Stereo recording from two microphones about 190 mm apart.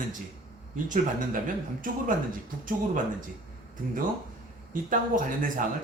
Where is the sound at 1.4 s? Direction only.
45° right (ahead or behind).